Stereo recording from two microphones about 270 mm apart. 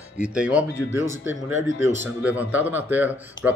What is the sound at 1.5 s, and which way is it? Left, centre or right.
Speech, left.